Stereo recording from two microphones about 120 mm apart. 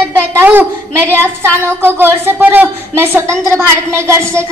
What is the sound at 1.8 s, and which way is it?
A woman's voice, 20° right (ahead or behind).